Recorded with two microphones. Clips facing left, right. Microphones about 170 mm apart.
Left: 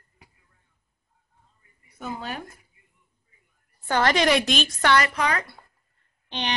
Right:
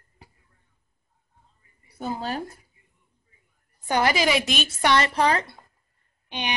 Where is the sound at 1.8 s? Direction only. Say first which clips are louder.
Right 4 dB; 35° right (ahead or behind).